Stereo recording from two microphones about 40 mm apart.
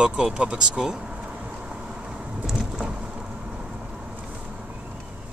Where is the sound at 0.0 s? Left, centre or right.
Right.